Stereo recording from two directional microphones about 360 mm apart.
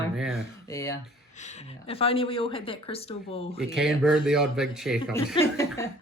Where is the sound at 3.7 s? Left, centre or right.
Centre.